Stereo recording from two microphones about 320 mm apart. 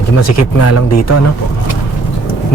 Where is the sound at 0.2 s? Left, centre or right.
Left.